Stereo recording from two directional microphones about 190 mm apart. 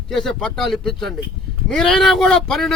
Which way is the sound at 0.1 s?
Centre (ahead or behind).